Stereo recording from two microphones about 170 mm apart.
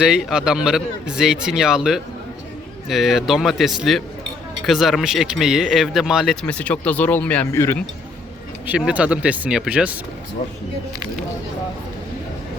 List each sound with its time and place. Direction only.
0.0 s speech: 5° right (ahead or behind); by 7.8 s 15° left (ahead or behind)
8.6 s speech: 10° right (ahead or behind)